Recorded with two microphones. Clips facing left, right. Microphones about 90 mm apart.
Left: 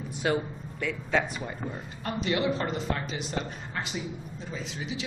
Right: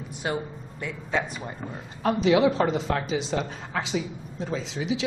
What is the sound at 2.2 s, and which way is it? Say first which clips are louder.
Speech: right 7 dB; 90° right.